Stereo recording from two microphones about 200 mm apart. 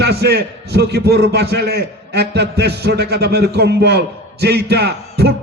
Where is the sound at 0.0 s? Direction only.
55° right (ahead or behind).